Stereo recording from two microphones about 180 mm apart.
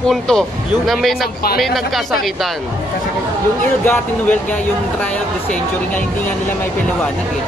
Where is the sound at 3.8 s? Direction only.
10° left (ahead or behind).